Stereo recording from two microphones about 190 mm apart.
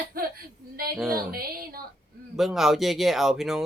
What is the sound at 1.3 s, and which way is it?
Speech, 50° right (ahead or behind).